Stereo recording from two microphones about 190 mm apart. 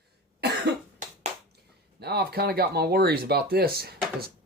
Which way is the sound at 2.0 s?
55° right (ahead or behind).